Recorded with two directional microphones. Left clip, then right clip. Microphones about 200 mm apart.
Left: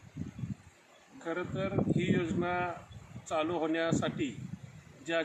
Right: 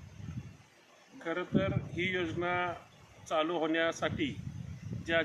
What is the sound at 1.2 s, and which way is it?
Speech, 15° right (ahead or behind).